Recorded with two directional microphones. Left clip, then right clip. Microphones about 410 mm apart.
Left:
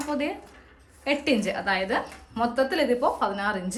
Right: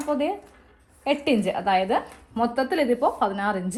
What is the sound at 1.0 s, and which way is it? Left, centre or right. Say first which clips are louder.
A woman's voice: right 2 dB; centre.